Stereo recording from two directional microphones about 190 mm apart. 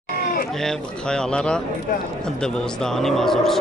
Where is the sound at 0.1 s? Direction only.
50° left (ahead or behind).